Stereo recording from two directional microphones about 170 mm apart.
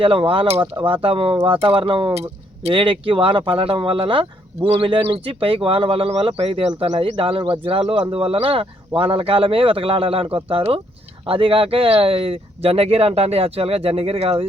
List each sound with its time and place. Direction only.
0.0 s speech: 30° right (ahead or behind)